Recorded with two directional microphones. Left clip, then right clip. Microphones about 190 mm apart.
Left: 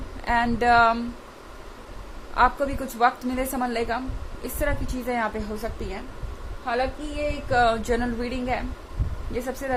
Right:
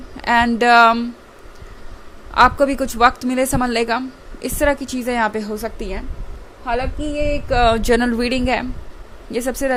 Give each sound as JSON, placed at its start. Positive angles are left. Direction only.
{"t": 0.3, "sound": "speech", "side_deg": -40}
{"t": 2.3, "sound": "a woman's voice", "side_deg": -45}